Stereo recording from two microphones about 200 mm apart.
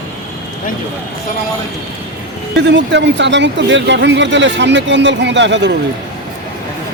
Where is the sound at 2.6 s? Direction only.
60° right (ahead or behind).